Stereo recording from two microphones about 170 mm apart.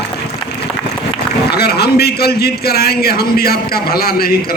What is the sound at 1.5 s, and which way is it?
A man's voice, 70° left (ahead or behind).